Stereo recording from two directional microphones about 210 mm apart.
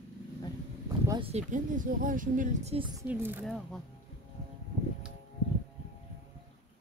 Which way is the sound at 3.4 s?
Centre (ahead or behind).